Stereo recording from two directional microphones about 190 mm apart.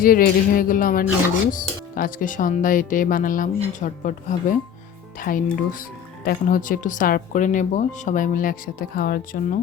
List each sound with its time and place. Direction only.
0.0 s speech: 45° left (ahead or behind)